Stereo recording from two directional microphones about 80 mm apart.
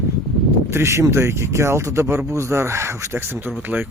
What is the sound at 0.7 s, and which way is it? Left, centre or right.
Speech, right.